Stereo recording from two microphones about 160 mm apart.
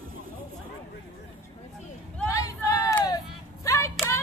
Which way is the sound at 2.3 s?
20° left (ahead or behind).